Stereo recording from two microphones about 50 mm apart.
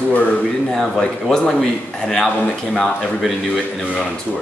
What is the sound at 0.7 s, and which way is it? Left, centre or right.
A man's voice, centre.